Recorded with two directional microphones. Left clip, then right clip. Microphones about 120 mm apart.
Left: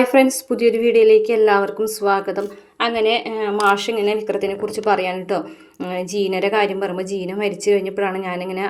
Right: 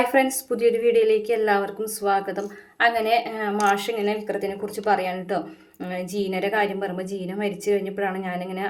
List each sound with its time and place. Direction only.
0.1 s a woman's voice: 25° left (ahead or behind)